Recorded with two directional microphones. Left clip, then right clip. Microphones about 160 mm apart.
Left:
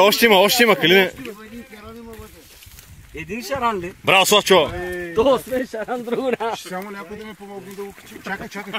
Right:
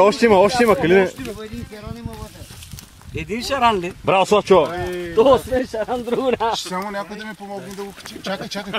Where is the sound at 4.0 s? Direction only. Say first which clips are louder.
Left 2 dB; 10° left (ahead or behind).